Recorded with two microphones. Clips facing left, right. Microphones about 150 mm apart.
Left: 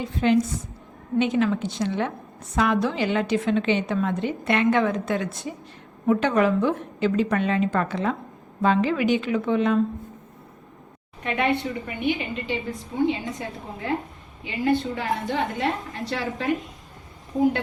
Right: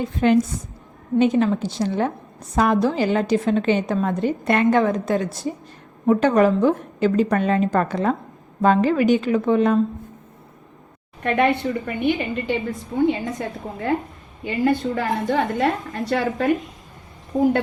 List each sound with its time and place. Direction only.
0.0 s a woman's voice: 50° right (ahead or behind)
11.2 s a woman's voice: 55° right (ahead or behind)
14.4 s a woman's voice: 50° right (ahead or behind)